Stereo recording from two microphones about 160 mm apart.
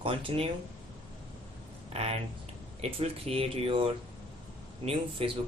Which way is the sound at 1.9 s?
40° right (ahead or behind).